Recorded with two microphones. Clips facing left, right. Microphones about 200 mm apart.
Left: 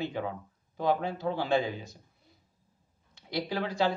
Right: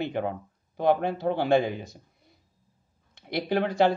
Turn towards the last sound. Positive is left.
turn(degrees=-60)  # may be behind; listen again after turning